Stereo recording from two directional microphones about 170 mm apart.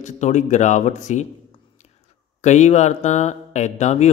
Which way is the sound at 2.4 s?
45° left (ahead or behind).